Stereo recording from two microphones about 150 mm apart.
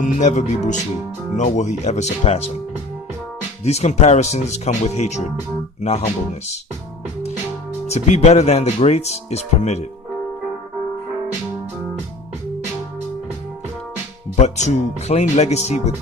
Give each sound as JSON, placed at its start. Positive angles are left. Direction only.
{"t": 0.0, "sound": "speech", "side_deg": 55}
{"t": 3.6, "sound": "speech", "side_deg": 45}
{"t": 7.9, "sound": "speech", "side_deg": 50}
{"t": 14.3, "sound": "speech", "side_deg": 50}